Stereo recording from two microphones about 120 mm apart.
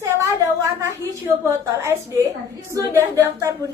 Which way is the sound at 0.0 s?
25° right (ahead or behind).